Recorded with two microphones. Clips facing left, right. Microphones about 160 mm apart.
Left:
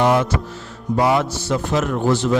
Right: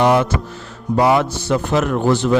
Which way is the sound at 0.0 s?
70° right (ahead or behind).